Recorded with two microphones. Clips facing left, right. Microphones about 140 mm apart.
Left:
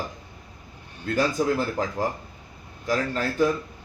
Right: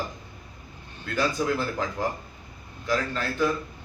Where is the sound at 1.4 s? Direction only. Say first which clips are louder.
Left 2 dB; 35° left (ahead or behind).